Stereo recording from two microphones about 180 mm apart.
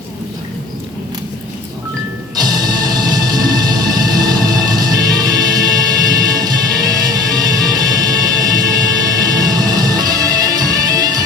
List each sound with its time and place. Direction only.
2.3 s music: 20° right (ahead or behind)